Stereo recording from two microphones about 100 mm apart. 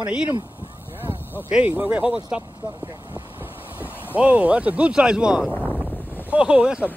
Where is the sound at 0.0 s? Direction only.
10° right (ahead or behind).